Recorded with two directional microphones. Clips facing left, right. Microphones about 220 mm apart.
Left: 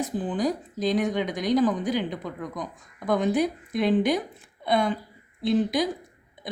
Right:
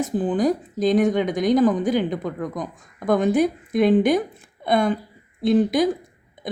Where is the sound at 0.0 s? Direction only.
50° right (ahead or behind).